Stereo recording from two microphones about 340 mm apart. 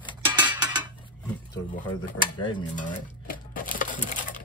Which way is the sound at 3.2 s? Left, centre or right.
Left.